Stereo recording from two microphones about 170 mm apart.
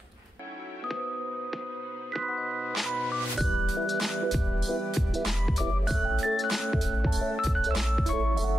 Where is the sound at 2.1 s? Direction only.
Centre (ahead or behind).